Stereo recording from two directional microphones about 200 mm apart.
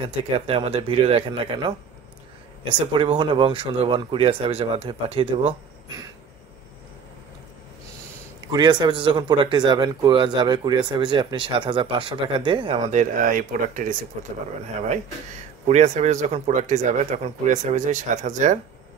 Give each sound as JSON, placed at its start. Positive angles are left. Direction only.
{"t": 0.5, "sound": "speech", "side_deg": -30}
{"t": 2.9, "sound": "speech", "side_deg": -25}
{"t": 8.5, "sound": "speech", "side_deg": -20}
{"t": 15.6, "sound": "speech", "side_deg": -35}